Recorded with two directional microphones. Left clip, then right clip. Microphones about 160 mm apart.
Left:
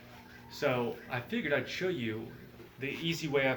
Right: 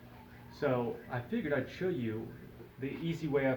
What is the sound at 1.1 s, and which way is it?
Speech, 5° left (ahead or behind).